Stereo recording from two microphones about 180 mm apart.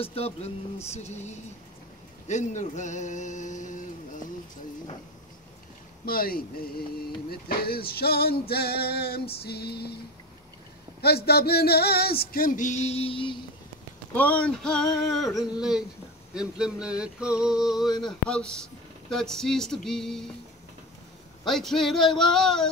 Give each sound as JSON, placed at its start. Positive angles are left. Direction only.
{"t": 0.0, "sound": "a sound", "side_deg": 35}
{"t": 6.0, "sound": "a sound", "side_deg": 55}
{"t": 7.2, "sound": "male singing", "side_deg": 60}
{"t": 11.0, "sound": "male singing", "side_deg": 60}
{"t": 14.1, "sound": "speech", "side_deg": 10}
{"t": 21.5, "sound": "speech", "side_deg": 0}